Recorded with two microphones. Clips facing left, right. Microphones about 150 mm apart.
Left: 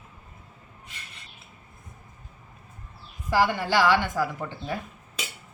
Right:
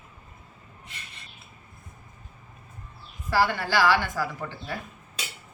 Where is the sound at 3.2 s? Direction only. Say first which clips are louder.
Left 1 dB; 15° left (ahead or behind).